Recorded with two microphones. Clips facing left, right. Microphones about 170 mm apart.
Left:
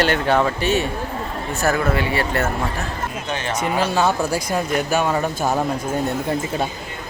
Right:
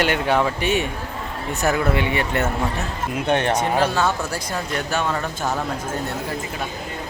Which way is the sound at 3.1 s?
60° right (ahead or behind).